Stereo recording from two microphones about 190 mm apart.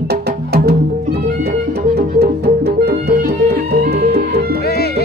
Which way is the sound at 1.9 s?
55° right (ahead or behind).